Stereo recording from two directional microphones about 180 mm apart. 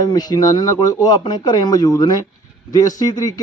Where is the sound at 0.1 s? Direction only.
20° left (ahead or behind).